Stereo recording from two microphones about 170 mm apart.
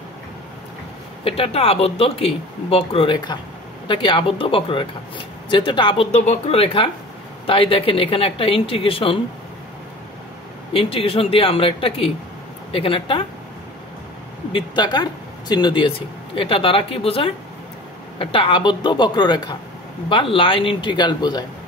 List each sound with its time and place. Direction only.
1.2 s speech: 35° left (ahead or behind)
10.7 s speech: 35° left (ahead or behind)
14.5 s speech: 25° left (ahead or behind)